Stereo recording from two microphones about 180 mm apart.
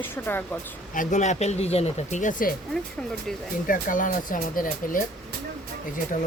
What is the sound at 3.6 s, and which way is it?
Speech, 45° left (ahead or behind).